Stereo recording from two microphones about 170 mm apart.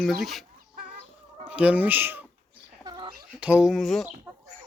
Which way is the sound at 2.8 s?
25° right (ahead or behind).